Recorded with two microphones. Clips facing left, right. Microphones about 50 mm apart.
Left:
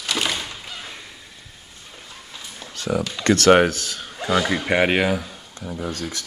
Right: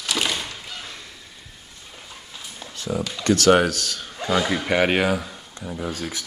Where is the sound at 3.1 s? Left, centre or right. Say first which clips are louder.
Left 2 dB; left.